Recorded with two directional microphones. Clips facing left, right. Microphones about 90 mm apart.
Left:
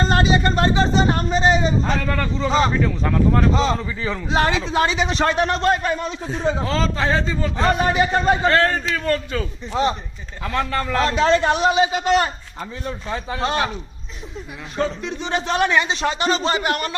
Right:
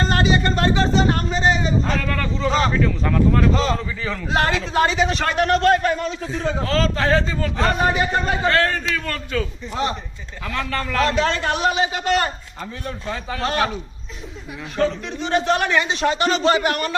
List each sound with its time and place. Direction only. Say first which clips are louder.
0.1 s a sound: left 1 dB; 25° left (ahead or behind)
1.9 s speech: left 1 dB; 20° left (ahead or behind)
14.8 s speech: right 2 dB; 20° left (ahead or behind)